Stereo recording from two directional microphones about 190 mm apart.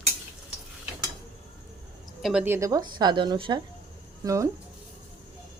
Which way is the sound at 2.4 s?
15° right (ahead or behind).